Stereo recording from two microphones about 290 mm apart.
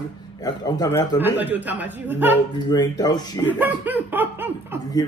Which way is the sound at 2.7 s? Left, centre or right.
Centre.